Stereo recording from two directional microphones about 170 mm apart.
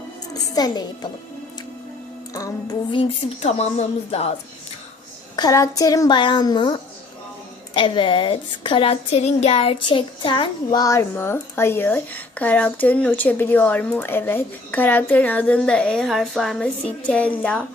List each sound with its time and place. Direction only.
0.5 s a child's voice: 25° left (ahead or behind)
2.3 s a child's voice: 20° left (ahead or behind)
3.4 s a woman's voice: 40° left (ahead or behind)
5.4 s a child's voice: 20° left (ahead or behind)